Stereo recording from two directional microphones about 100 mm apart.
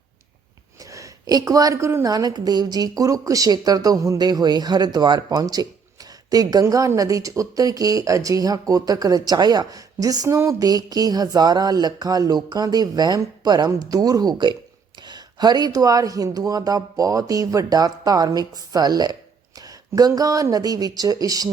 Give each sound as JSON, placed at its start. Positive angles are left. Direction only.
{"t": 0.8, "sound": "a woman's voice", "side_deg": -35}
{"t": 2.0, "sound": "a woman's voice", "side_deg": -40}